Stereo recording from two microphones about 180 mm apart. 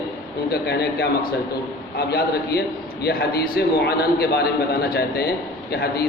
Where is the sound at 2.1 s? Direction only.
60° left (ahead or behind).